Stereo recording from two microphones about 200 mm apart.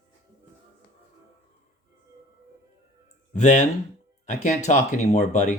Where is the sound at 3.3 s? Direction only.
40° left (ahead or behind).